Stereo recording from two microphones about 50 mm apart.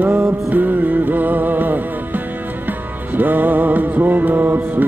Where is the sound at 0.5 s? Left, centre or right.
Right.